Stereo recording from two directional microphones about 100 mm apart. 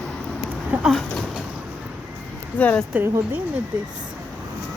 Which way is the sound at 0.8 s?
Centre (ahead or behind).